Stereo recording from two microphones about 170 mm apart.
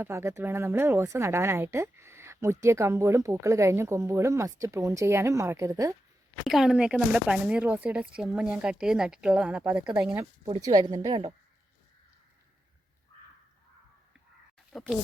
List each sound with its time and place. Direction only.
0.0 s speech: 15° right (ahead or behind)
6.4 s speech: centre (ahead or behind)
10.4 s a woman's voice: 25° right (ahead or behind)
14.7 s speech: centre (ahead or behind)